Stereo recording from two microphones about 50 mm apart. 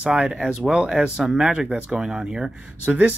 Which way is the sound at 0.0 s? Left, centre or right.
Right.